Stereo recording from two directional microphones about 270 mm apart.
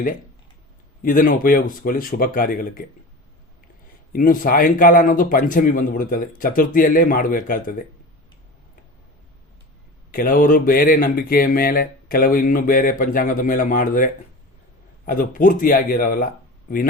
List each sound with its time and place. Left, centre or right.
1.0 s speech: left
4.1 s speech: left
10.1 s speech: left